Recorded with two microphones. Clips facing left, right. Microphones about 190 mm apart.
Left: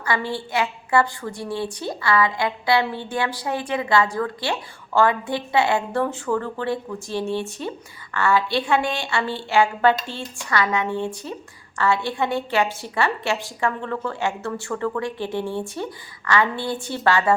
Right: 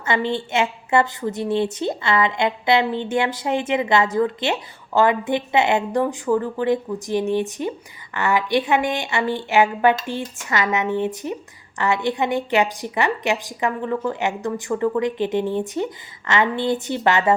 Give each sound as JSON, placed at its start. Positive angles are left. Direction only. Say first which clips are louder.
{"t": 0.0, "sound": "a woman's voice", "louder": "right 3 dB", "side_deg": -20}